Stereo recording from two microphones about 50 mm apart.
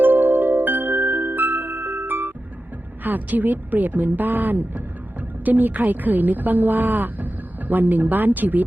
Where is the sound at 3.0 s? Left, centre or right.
Right.